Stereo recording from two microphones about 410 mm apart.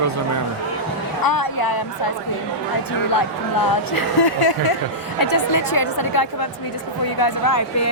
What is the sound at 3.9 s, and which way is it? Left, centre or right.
Speech, left.